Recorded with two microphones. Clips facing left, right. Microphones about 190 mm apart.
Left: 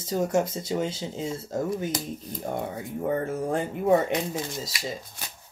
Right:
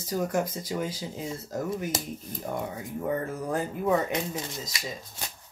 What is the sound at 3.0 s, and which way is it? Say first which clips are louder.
Speech: left 3 dB; 30° left (ahead or behind).